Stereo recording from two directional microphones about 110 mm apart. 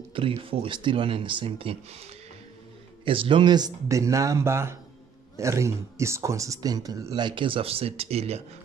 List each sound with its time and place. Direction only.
0.1 s speech: 55° right (ahead or behind)
3.1 s speech: 55° right (ahead or behind); by 7.2 s 30° right (ahead or behind)
7.2 s speech: 45° right (ahead or behind); by 8.4 s 65° right (ahead or behind)